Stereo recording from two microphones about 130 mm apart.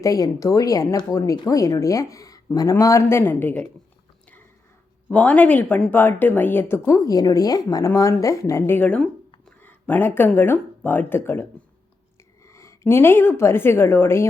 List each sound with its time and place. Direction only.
0.0 s speech: 25° left (ahead or behind)
5.0 s a woman's voice: 10° left (ahead or behind)
12.5 s a woman's voice: 25° left (ahead or behind)